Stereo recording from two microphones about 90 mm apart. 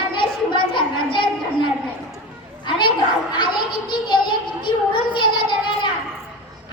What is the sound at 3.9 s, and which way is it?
A woman's voice, 60° left (ahead or behind).